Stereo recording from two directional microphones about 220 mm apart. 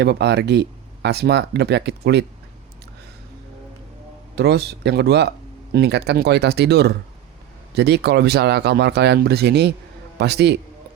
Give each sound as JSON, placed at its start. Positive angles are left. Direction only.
{"t": 0.0, "sound": "speech", "side_deg": -50}
{"t": 4.4, "sound": "speech", "side_deg": -45}